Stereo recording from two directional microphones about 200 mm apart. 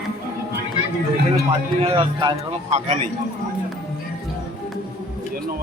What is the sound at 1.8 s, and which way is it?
A man's voice, 25° right (ahead or behind).